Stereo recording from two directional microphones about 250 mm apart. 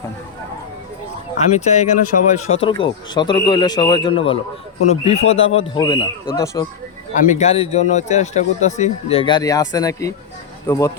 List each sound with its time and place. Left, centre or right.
1.4 s speech: left
7.1 s speech: left; by 10.9 s centre